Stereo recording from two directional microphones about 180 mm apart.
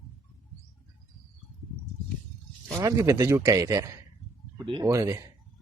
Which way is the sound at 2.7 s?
20° right (ahead or behind).